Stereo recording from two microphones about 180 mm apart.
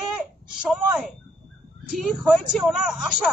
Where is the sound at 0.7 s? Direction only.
5° right (ahead or behind).